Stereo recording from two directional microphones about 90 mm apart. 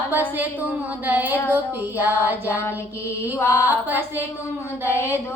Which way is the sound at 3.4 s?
30° left (ahead or behind).